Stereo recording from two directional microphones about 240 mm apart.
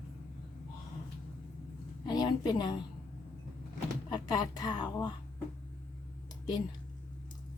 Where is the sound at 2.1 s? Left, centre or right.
Centre.